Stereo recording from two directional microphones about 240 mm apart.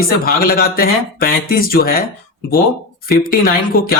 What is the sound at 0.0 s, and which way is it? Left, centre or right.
Speech, left.